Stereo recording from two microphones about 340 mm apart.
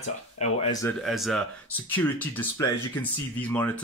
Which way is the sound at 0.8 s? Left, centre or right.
Centre.